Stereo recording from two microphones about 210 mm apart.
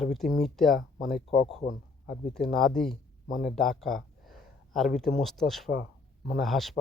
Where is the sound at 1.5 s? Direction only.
30° left (ahead or behind).